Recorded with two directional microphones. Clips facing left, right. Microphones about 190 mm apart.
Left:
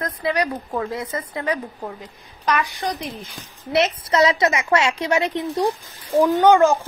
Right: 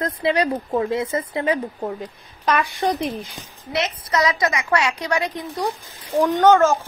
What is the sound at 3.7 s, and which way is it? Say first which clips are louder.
Speech: left 4 dB; 25° left (ahead or behind).